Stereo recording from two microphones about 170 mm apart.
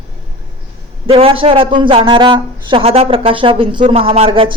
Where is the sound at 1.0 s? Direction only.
35° right (ahead or behind).